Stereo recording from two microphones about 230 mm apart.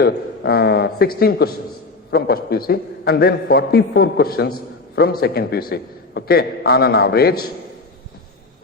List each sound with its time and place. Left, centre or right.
0.0 s a man's voice: left